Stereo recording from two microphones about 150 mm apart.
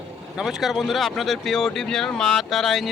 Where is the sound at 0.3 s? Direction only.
Centre (ahead or behind).